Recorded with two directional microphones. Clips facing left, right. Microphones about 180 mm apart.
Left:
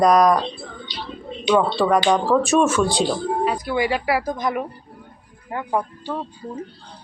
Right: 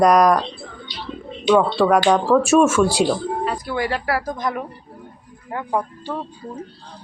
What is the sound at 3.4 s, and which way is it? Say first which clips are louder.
Speech: left 2 dB; 5° left (ahead or behind).